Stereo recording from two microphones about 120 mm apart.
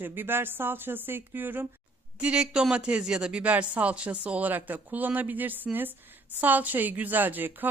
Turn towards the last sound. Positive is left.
turn(degrees=-15)  # may be behind; listen again after turning